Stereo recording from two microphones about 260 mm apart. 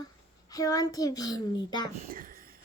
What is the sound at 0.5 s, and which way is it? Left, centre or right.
Speech, centre.